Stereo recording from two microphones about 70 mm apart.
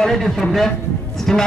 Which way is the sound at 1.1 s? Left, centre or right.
Centre.